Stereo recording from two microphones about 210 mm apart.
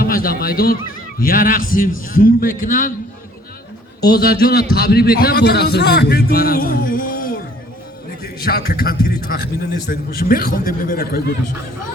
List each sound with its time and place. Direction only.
0.0 s a man's voice: 45° left (ahead or behind)
4.0 s a man's voice: 45° left (ahead or behind)